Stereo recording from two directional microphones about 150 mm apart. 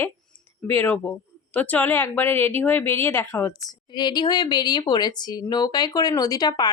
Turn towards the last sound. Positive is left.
turn(degrees=25)  # may be behind; listen again after turning